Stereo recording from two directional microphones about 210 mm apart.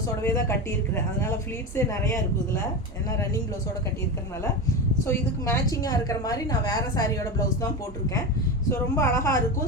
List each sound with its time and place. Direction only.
0.2 s a woman's voice: 15° left (ahead or behind)
1.7 s a woman's voice: 15° left (ahead or behind)
5.0 s a woman's voice: 15° left (ahead or behind)
8.7 s a woman's voice: 15° left (ahead or behind)